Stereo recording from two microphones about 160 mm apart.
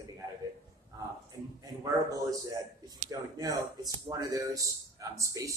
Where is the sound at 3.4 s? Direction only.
25° right (ahead or behind).